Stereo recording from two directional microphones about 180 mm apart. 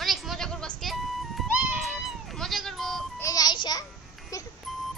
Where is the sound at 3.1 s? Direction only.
20° left (ahead or behind).